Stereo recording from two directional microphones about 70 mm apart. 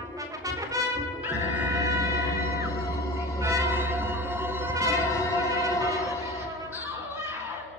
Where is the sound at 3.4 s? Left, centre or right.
Right.